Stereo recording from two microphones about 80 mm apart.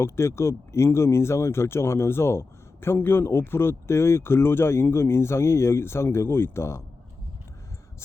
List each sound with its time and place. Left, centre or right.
0.0 s speech: left